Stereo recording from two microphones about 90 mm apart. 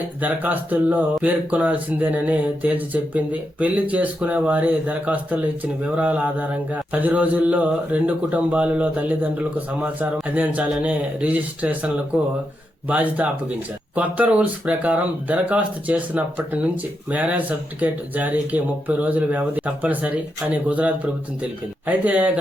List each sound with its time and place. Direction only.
0.2 s speech: 20° right (ahead or behind)